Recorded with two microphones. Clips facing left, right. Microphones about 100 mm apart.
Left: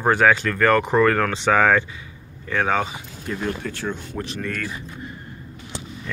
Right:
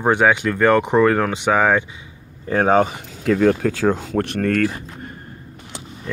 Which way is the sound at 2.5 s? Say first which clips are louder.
Right 6 dB; 40° right (ahead or behind).